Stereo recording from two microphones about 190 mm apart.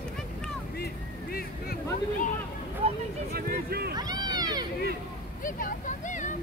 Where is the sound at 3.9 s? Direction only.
20° right (ahead or behind).